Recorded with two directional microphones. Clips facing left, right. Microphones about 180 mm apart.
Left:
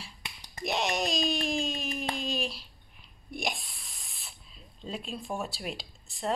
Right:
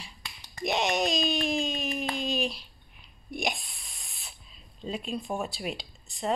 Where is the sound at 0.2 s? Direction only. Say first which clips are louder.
Right 4 dB; 20° left (ahead or behind).